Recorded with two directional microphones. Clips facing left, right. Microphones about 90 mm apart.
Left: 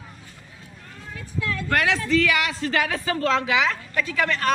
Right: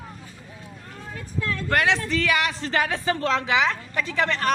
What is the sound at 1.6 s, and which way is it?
A woman's voice, 25° right (ahead or behind).